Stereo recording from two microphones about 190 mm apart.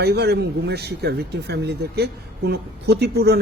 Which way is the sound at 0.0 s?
60° right (ahead or behind).